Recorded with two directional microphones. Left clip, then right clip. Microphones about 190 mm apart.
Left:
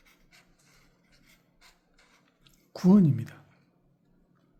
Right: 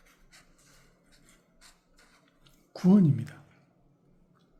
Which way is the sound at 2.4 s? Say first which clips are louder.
Left 2 dB; 20° left (ahead or behind).